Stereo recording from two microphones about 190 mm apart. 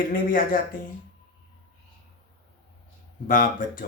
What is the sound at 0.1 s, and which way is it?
Speech, 45° left (ahead or behind).